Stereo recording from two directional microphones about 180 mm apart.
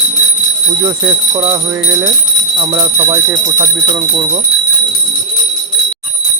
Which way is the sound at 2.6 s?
20° right (ahead or behind).